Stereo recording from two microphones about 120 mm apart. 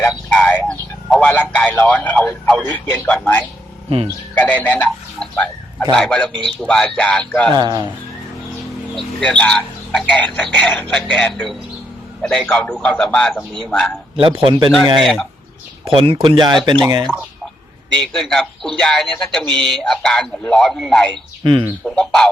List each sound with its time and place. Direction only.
0.0 s a sound: 10° left (ahead or behind)
1.3 s a man's voice: 10° left (ahead or behind)
3.8 s speech: 55° right (ahead or behind)
4.4 s speech: 15° left (ahead or behind)
6.3 s speech: 40° right (ahead or behind)
6.6 s a man's voice: 5° left (ahead or behind)
7.5 s speech: 35° right (ahead or behind)
9.0 s a man's voice: 10° left (ahead or behind)
14.2 s speech: 45° right (ahead or behind)
14.9 s speech: centre (ahead or behind)
15.9 s speech: 50° right (ahead or behind)
18.0 s speech: 5° left (ahead or behind)